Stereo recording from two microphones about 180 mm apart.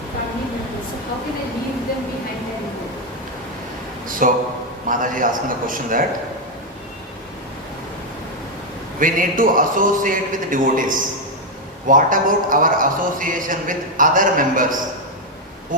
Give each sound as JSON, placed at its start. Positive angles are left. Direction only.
{"t": 4.2, "sound": "a man's voice", "side_deg": -50}
{"t": 9.0, "sound": "a man's voice", "side_deg": -50}